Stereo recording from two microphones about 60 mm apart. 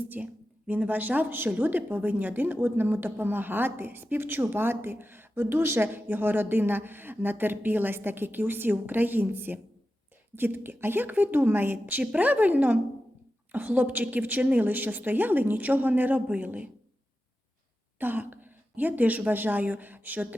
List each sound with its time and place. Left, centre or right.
0.1 s a woman's voice: right
18.0 s a woman's voice: right